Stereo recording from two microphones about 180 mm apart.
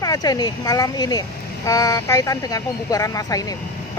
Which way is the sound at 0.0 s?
20° left (ahead or behind).